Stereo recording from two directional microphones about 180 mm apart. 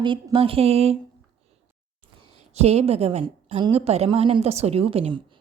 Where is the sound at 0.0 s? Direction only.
25° right (ahead or behind).